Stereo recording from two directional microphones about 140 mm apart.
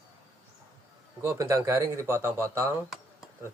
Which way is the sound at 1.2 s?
20° right (ahead or behind).